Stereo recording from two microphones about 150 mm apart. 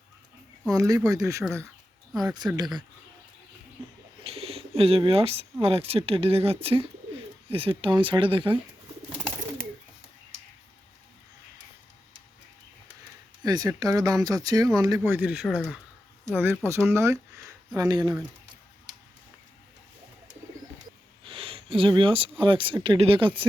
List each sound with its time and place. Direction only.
0.7 s speech: 20° right (ahead or behind)
4.2 s speech: 40° right (ahead or behind)
13.4 s speech: 25° right (ahead or behind); by 15.8 s centre (ahead or behind)
16.3 s speech: 15° right (ahead or behind)
21.2 s speech: 35° right (ahead or behind)